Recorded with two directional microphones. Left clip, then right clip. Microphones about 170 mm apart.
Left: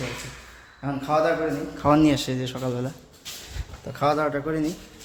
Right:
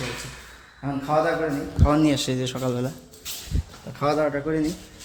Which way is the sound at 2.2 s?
10° right (ahead or behind).